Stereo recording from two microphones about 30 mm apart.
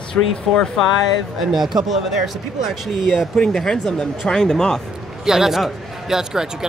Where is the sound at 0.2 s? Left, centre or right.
Left.